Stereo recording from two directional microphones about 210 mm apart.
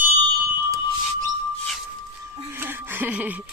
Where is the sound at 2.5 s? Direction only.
10° right (ahead or behind).